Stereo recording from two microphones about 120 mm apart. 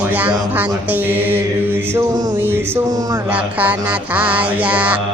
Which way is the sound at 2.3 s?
20° right (ahead or behind).